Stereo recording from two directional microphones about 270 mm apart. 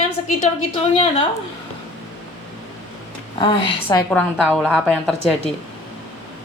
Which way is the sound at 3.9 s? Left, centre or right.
Centre.